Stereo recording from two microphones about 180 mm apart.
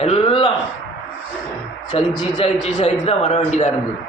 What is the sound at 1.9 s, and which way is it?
A man's voice, 35° left (ahead or behind).